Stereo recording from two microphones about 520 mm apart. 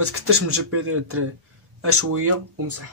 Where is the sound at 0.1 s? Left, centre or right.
Right.